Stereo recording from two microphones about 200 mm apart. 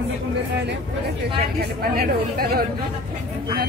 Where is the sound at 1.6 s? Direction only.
50° right (ahead or behind).